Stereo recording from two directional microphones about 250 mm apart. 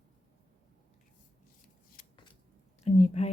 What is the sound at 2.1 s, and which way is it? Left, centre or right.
Scissors, centre.